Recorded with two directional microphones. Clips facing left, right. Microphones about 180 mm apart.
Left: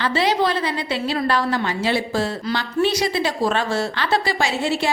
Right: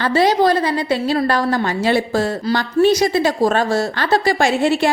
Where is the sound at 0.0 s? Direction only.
45° right (ahead or behind).